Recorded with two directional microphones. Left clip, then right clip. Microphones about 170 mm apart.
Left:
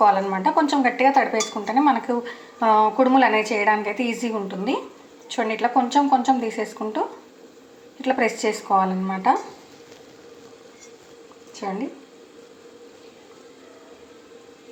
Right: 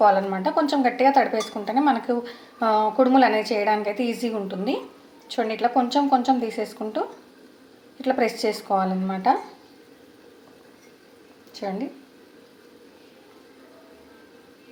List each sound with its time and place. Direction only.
0.0 s speech: 15° right (ahead or behind)
8.0 s speech: 15° right (ahead or behind)